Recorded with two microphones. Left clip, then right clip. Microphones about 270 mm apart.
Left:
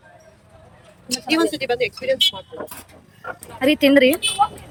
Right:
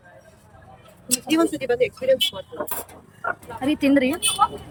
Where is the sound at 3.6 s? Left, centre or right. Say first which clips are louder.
Left 6 dB; centre.